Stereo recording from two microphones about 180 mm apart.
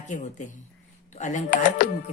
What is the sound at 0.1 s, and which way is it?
A woman's voice, 40° left (ahead or behind).